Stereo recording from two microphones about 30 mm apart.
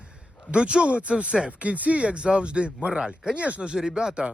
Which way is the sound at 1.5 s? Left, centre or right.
Right.